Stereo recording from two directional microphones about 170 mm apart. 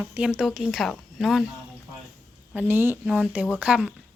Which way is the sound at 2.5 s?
10° right (ahead or behind).